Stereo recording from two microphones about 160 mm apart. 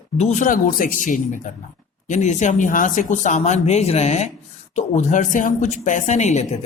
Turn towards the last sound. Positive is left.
turn(degrees=45)  # may be behind; listen again after turning